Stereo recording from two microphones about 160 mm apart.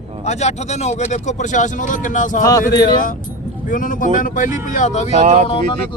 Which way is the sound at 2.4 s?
20° left (ahead or behind).